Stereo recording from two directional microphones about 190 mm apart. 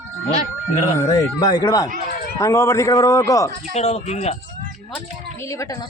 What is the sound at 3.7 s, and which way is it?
Speech, 35° left (ahead or behind).